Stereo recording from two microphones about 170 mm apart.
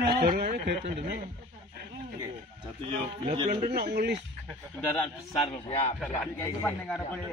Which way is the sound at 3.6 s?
65° right (ahead or behind).